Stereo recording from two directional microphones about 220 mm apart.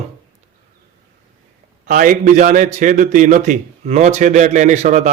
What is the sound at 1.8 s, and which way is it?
A man's voice, 35° right (ahead or behind).